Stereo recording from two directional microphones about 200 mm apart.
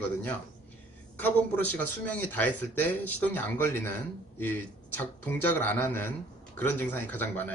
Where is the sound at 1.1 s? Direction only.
10° left (ahead or behind).